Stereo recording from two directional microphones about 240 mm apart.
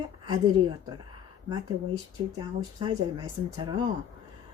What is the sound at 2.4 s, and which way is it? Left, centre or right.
Speech, centre.